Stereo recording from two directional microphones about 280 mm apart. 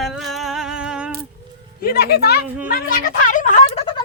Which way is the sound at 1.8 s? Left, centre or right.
Left.